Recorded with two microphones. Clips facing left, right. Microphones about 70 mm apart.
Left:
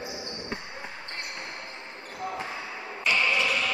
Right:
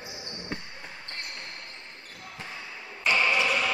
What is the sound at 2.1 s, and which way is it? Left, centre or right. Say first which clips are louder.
Basketball bounce: left 9 dB; centre.